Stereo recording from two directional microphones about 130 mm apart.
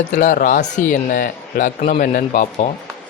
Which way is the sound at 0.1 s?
90° left.